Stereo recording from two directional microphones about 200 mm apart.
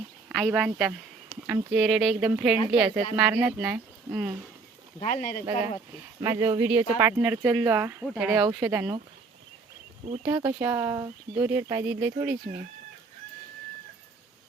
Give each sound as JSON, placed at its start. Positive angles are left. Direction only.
{"t": 0.3, "sound": "speech", "side_deg": -5}
{"t": 4.9, "sound": "speech", "side_deg": 40}
{"t": 6.1, "sound": "speech", "side_deg": -20}
{"t": 10.2, "sound": "speech", "side_deg": -10}